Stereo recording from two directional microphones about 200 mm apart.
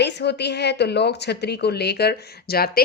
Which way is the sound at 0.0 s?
55° left (ahead or behind).